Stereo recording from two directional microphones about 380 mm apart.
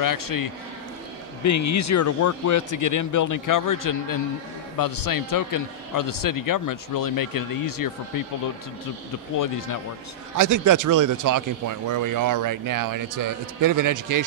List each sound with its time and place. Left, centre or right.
0.0 s a man's voice: left
1.4 s a man's voice: left
9.4 s speech: left
10.3 s speech: right